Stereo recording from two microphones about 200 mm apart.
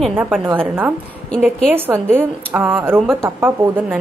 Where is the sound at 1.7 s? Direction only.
10° right (ahead or behind).